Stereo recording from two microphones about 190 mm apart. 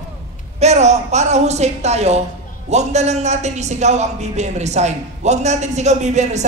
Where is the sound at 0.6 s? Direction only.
35° right (ahead or behind).